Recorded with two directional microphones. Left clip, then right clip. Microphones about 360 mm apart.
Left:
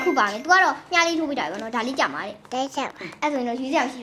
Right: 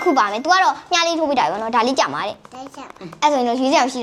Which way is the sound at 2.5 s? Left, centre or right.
Left.